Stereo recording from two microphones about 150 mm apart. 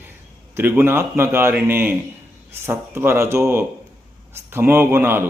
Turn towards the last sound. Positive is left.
turn(degrees=-15)  # may be behind; listen again after turning